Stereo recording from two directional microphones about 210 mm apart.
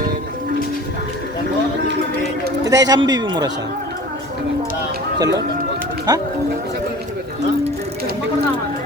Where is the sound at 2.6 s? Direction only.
15° right (ahead or behind).